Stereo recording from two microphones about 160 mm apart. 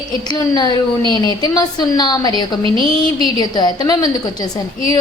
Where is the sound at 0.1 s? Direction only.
25° left (ahead or behind).